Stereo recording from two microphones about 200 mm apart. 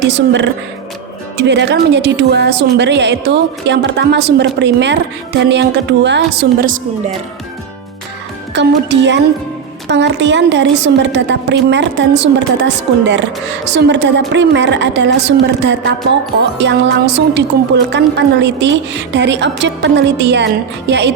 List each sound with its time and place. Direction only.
0.1 s a woman's voice: 60° right (ahead or behind)
8.5 s a woman's voice: 60° right (ahead or behind)